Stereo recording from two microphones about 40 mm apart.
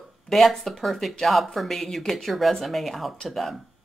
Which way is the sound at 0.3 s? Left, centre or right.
Centre.